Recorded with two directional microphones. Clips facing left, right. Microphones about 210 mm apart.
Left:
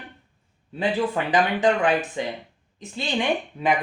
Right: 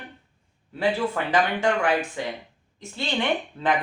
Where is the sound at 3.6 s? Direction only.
15° left (ahead or behind).